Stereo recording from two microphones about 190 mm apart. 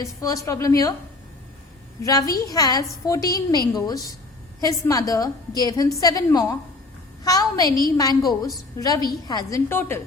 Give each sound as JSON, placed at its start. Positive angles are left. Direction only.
{"t": 0.0, "sound": "a woman's voice", "side_deg": 15}
{"t": 2.0, "sound": "a woman's voice", "side_deg": 20}